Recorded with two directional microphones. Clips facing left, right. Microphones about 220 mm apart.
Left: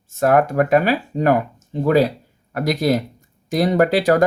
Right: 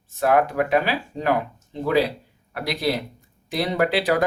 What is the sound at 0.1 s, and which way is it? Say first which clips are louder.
Speech: left 4 dB; 45° left (ahead or behind).